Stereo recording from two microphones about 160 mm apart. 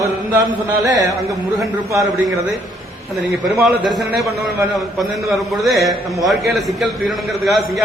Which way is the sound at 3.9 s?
Centre (ahead or behind).